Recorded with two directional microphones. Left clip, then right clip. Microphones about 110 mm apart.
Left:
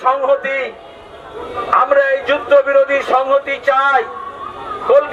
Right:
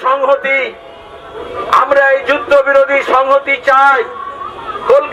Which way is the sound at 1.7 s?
25° right (ahead or behind).